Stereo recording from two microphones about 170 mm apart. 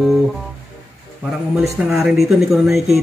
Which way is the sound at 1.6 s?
5° right (ahead or behind).